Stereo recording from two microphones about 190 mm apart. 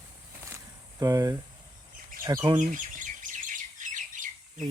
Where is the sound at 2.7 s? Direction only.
45° right (ahead or behind).